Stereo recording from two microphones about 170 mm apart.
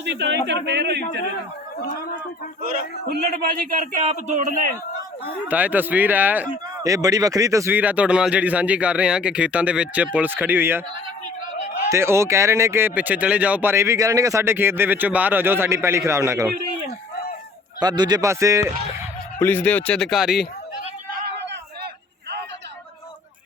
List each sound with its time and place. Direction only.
0.0 s speech: 85° right
2.6 s speech: 55° right (ahead or behind)
3.7 s speech: 50° right (ahead or behind)
5.5 s speech: 10° right (ahead or behind)
6.8 s speech: 20° right (ahead or behind)
11.9 s speech: 15° right (ahead or behind)
17.7 s speech: 25° right (ahead or behind)
19.4 s speech: 10° left (ahead or behind)